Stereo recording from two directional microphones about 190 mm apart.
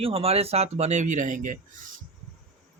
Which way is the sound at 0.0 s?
30° right (ahead or behind).